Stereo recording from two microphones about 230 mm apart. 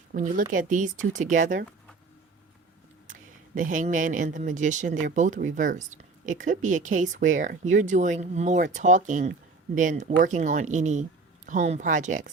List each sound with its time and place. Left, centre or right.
0.1 s a woman's voice: right
3.1 s a woman's voice: right